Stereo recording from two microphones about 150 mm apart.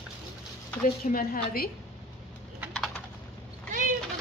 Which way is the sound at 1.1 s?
80° left.